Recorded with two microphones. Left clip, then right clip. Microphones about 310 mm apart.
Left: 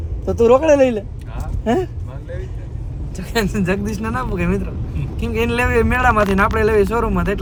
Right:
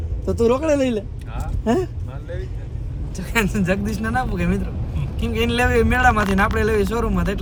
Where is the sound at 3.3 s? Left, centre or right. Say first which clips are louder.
Left 1 dB; centre.